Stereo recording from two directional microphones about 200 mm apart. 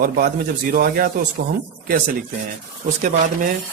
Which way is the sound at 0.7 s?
45° right (ahead or behind).